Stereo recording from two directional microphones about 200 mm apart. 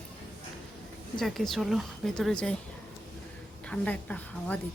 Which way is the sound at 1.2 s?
Centre (ahead or behind).